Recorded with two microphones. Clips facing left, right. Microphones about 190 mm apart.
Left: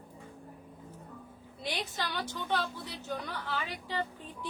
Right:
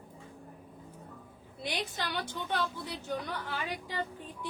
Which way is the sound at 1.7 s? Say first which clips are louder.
Right 1 dB; 55° right (ahead or behind).